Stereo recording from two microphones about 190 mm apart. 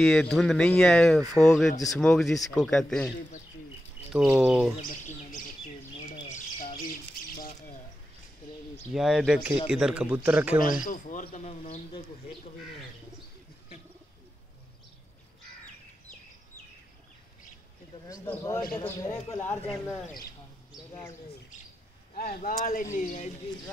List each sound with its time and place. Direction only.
0.0 s speech: centre (ahead or behind)
4.1 s speech: 5° right (ahead or behind)
4.8 s bird: 45° left (ahead or behind)
8.9 s a man's voice: centre (ahead or behind)
10.6 s speech: 45° left (ahead or behind)
18.0 s speech: 20° left (ahead or behind)
22.1 s speech: 50° left (ahead or behind)